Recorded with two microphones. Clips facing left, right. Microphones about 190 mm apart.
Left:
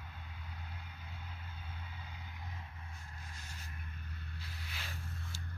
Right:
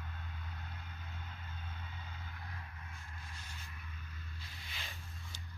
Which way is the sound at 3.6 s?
50° left (ahead or behind).